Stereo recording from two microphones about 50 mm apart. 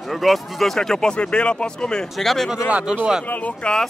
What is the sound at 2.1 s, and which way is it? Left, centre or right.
Music, centre.